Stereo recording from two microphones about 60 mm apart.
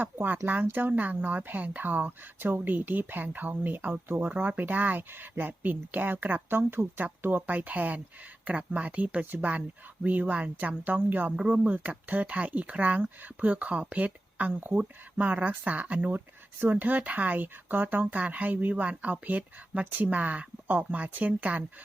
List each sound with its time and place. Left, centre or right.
0.0 s speech: right